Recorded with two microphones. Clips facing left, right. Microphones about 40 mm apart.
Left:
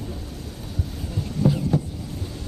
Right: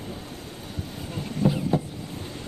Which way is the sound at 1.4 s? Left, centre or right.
Right.